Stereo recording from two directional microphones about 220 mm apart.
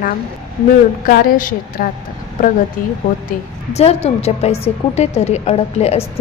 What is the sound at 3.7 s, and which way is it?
A woman's voice, 30° left (ahead or behind).